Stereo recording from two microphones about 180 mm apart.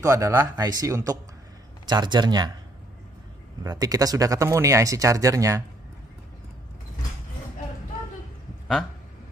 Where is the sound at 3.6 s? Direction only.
20° right (ahead or behind).